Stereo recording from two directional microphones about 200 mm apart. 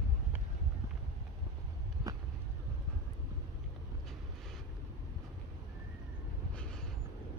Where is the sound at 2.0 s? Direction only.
20° right (ahead or behind).